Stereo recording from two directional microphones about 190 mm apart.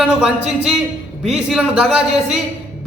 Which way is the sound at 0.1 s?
5° right (ahead or behind).